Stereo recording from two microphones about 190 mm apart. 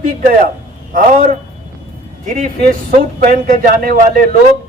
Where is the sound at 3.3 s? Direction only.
45° right (ahead or behind).